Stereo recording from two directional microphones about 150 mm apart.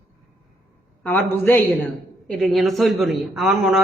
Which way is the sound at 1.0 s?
15° left (ahead or behind).